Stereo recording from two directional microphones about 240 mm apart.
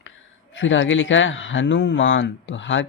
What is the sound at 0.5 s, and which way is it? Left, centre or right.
Speech, left.